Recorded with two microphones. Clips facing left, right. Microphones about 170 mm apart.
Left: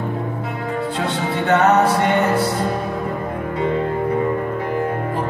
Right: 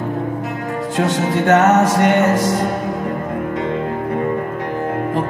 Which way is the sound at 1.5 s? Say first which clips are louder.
Right 2 dB; 90° right.